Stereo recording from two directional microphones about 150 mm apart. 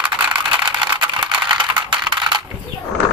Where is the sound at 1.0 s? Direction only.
30° right (ahead or behind).